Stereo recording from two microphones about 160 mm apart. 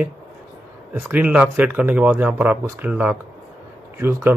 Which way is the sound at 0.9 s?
10° right (ahead or behind).